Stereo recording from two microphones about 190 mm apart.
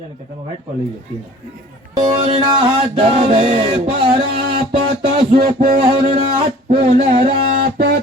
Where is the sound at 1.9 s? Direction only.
25° right (ahead or behind).